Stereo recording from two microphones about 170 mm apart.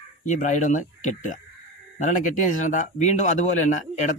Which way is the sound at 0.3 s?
45° left (ahead or behind).